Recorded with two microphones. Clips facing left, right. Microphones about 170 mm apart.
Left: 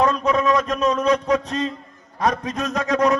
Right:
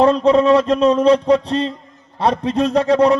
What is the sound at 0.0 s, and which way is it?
A man's voice, 30° right (ahead or behind).